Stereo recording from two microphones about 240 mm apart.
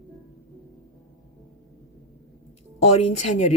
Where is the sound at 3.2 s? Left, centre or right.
Left.